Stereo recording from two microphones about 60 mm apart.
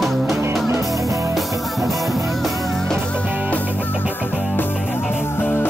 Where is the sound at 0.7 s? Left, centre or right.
Right.